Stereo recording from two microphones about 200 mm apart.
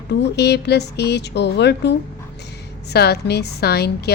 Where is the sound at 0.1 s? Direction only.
55° left (ahead or behind).